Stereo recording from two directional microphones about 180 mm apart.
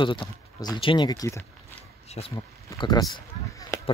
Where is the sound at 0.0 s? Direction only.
25° left (ahead or behind).